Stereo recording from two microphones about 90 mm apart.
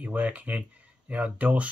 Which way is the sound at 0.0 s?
15° right (ahead or behind).